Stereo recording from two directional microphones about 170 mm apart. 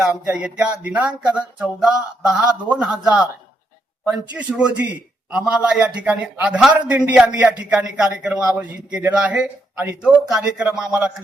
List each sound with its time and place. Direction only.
0.0 s a man's voice: 5° right (ahead or behind)